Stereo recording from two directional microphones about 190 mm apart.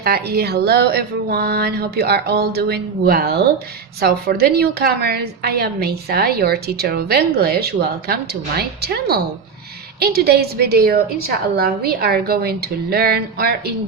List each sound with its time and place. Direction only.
0.0 s a woman's voice: 55° right (ahead or behind)